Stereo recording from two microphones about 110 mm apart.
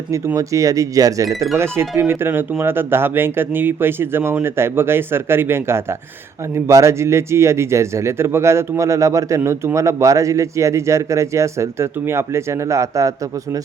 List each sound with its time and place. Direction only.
0.3 s speech: 30° right (ahead or behind)